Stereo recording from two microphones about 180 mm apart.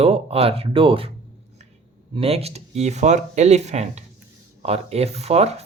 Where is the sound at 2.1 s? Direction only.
35° right (ahead or behind).